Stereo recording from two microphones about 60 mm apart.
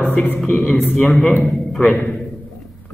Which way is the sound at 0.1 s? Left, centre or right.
Left.